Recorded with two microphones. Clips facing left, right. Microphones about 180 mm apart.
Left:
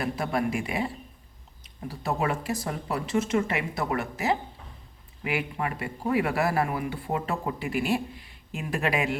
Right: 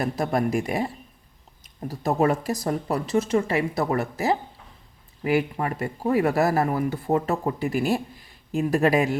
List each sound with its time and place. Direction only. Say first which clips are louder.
0.0 s a man's voice: right 4 dB; 45° right (ahead or behind)